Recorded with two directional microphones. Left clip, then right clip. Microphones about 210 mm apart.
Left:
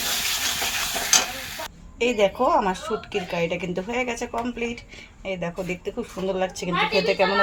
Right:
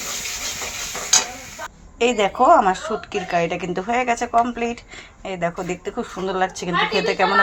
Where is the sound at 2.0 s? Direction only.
10° right (ahead or behind).